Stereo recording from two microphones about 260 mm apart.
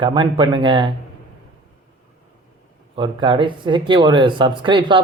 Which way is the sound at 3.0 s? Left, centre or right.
Centre.